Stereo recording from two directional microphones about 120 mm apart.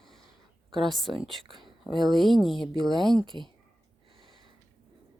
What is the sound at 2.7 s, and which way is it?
Speech, 35° right (ahead or behind).